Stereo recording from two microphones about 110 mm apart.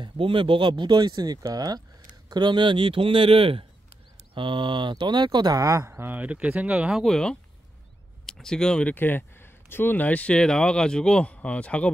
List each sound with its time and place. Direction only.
0.0 s a man's voice: 50° right (ahead or behind); by 7.1 s 10° right (ahead or behind)
7.1 s speech: 5° left (ahead or behind)